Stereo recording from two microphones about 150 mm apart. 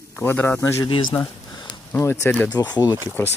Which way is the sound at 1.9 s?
15° left (ahead or behind).